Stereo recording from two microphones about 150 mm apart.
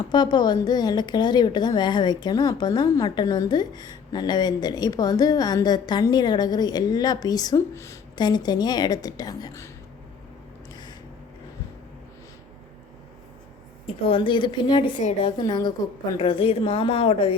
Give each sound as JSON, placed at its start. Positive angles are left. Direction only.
{"t": 0.1, "sound": "a woman's voice", "side_deg": 30}
{"t": 14.1, "sound": "a woman's voice", "side_deg": 35}